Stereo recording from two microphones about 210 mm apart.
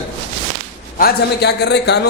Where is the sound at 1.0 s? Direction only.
50° left (ahead or behind).